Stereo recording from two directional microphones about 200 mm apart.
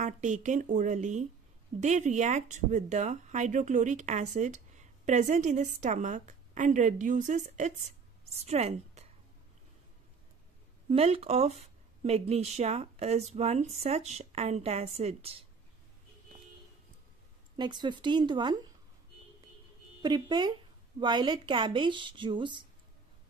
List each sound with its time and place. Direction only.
0.0 s a woman's voice: 35° right (ahead or behind)
10.9 s speech: 30° right (ahead or behind)
17.6 s a woman's voice: 20° right (ahead or behind)
20.0 s a woman's voice: 20° right (ahead or behind)